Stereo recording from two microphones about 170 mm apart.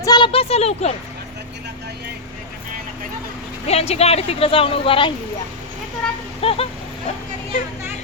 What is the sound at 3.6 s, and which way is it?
Speech, 35° left (ahead or behind).